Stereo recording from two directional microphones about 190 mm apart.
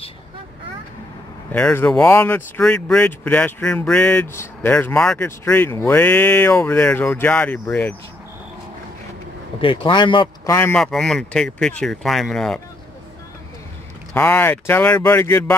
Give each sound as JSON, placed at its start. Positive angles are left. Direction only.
{"t": 1.5, "sound": "speech", "side_deg": 10}
{"t": 9.6, "sound": "speech", "side_deg": 25}
{"t": 10.5, "sound": "speech", "side_deg": 10}
{"t": 14.1, "sound": "speech", "side_deg": 10}